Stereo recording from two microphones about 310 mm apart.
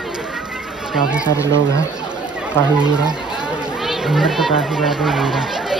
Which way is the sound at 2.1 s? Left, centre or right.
Centre.